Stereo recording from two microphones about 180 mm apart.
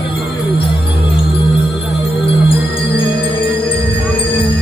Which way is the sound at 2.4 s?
30° left (ahead or behind).